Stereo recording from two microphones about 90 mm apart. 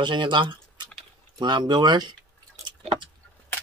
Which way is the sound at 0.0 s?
60° right (ahead or behind).